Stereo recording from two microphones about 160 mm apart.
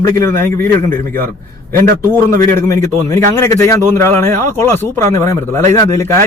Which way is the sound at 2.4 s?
15° left (ahead or behind).